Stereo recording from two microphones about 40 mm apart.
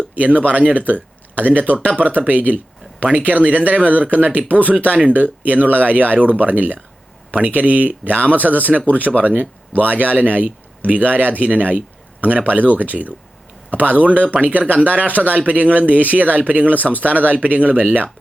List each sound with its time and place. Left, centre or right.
0.2 s speech: right
4.9 s speech: right